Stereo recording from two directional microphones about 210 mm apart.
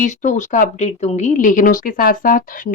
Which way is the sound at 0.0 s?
35° left (ahead or behind).